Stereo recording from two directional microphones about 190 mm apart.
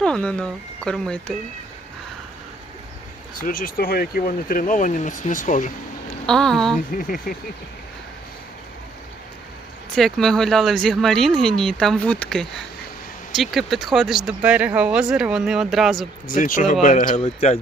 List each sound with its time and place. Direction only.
0.0 s speech: 5° left (ahead or behind)
3.3 s speech: 50° left (ahead or behind)
6.2 s speech: 5° left (ahead or behind)
6.9 s speech: 45° left (ahead or behind)
9.9 s speech: centre (ahead or behind)
16.2 s a man's voice: 45° left (ahead or behind)